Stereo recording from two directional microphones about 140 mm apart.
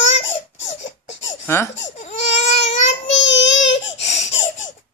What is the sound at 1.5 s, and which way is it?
Speech, 20° left (ahead or behind).